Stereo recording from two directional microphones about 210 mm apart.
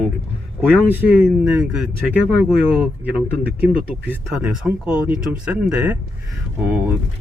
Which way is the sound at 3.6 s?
5° right (ahead or behind).